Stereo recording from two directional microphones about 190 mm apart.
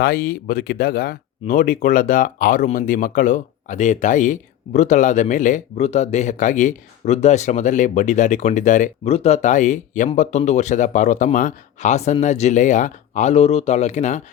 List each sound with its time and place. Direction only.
0.0 s speech: 50° left (ahead or behind)